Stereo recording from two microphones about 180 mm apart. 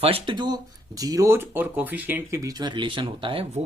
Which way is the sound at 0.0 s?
30° right (ahead or behind).